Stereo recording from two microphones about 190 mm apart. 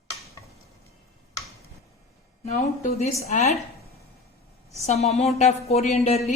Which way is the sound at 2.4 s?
35° left (ahead or behind).